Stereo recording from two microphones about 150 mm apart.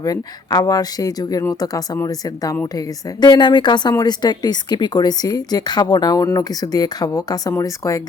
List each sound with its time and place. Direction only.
0.0 s a woman's voice: 25° left (ahead or behind)